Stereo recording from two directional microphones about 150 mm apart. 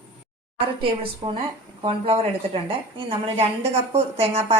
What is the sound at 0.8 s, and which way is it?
A woman's voice, 35° right (ahead or behind).